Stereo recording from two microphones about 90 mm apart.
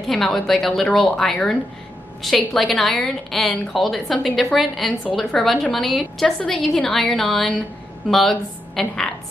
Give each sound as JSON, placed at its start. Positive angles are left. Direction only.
{"t": 0.1, "sound": "a woman's voice", "side_deg": 5}
{"t": 2.2, "sound": "a woman's voice", "side_deg": 0}